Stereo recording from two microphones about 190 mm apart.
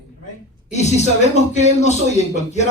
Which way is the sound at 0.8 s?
35° left (ahead or behind).